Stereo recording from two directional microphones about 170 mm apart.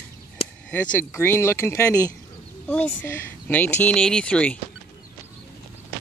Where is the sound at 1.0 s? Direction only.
15° left (ahead or behind).